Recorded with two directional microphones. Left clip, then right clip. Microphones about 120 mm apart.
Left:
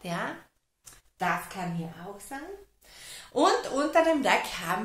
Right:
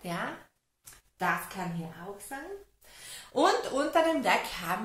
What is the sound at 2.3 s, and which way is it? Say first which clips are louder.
Speech: left 1 dB; 20° left (ahead or behind).